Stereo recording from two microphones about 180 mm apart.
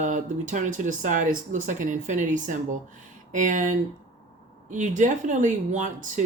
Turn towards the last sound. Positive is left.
turn(degrees=-45)  # may be behind; listen again after turning